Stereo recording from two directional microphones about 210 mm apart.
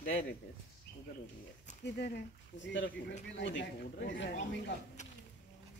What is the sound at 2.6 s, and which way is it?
Speech, 60° left (ahead or behind).